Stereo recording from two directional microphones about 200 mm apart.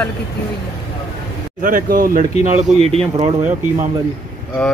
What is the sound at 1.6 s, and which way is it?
Speech, 45° right (ahead or behind).